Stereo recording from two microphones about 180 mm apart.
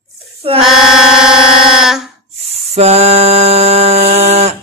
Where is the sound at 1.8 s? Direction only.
5° right (ahead or behind).